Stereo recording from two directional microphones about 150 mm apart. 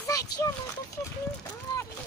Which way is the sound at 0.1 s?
25° left (ahead or behind).